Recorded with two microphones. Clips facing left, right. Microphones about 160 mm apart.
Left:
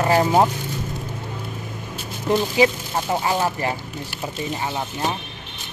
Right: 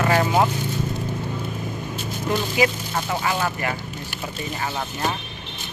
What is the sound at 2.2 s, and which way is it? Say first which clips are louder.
Speech: left 4 dB; 30° left (ahead or behind).